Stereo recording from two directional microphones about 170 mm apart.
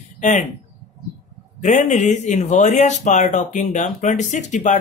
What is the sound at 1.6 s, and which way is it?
Speech, 45° left (ahead or behind).